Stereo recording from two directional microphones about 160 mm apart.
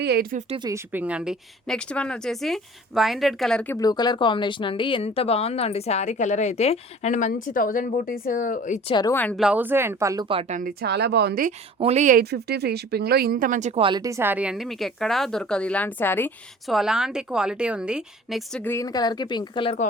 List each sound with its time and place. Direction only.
0.0 s speech: 80° right
0.7 s a woman's voice: 10° right (ahead or behind); by 3.8 s 5° left (ahead or behind)
3.8 s speech: 25° left (ahead or behind); by 8.8 s 55° left (ahead or behind)
8.9 s speech: 25° left (ahead or behind)
9.1 s speech: 10° left (ahead or behind)
9.4 s speech: 10° right (ahead or behind)
10.8 s speech: 90° right
11.8 s speech: 45° right (ahead or behind)
12.2 s speech: 90° right; by 13.8 s 45° right (ahead or behind)
13.8 s a woman's voice: 25° right (ahead or behind); by 16.3 s 15° left (ahead or behind)
16.6 s a woman's voice: centre (ahead or behind)
18.6 s speech: 20° left (ahead or behind)